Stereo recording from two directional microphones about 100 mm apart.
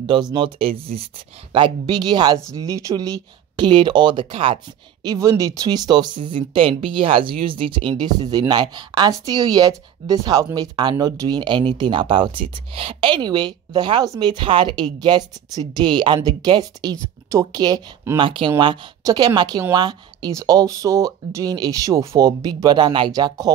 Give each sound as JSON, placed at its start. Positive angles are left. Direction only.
{"t": 0.0, "sound": "speech", "side_deg": -55}
{"t": 0.6, "sound": "speech", "side_deg": -70}
{"t": 1.5, "sound": "a woman's voice", "side_deg": -50}
{"t": 5.0, "sound": "speech", "side_deg": -35}
{"t": 8.0, "sound": "a woman's voice", "side_deg": -45}
{"t": 18.1, "sound": "a woman's voice", "side_deg": -55}